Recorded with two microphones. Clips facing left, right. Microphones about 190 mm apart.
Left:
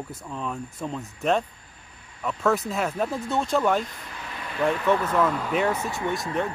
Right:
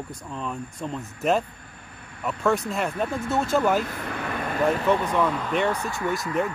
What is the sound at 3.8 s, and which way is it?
Vehicle, 65° right (ahead or behind).